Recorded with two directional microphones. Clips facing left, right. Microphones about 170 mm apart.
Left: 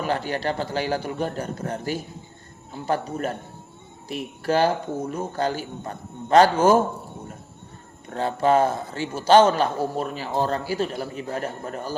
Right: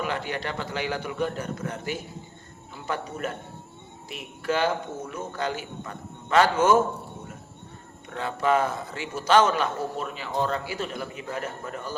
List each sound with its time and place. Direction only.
0.0 s a man's voice: 35° left (ahead or behind)
8.1 s a man's voice: 35° left (ahead or behind)